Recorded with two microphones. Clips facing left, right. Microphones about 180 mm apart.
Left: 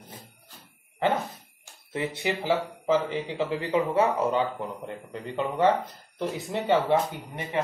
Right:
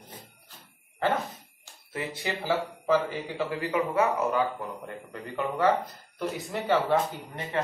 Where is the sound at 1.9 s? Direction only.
25° left (ahead or behind).